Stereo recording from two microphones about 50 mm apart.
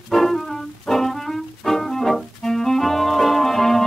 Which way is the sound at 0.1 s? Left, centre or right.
Centre.